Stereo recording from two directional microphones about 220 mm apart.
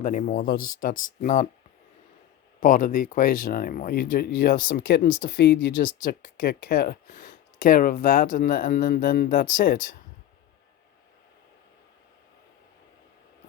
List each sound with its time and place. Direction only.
0.0 s speech: 35° left (ahead or behind)
2.6 s speech: 35° left (ahead or behind)